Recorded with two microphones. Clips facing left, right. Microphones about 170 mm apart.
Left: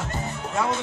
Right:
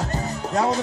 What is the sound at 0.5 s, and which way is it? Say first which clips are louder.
Music: right 4 dB; 35° right (ahead or behind).